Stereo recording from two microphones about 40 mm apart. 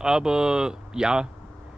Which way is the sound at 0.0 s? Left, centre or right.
Centre.